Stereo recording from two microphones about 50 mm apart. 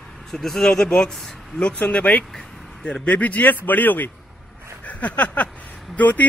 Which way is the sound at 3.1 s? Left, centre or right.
Left.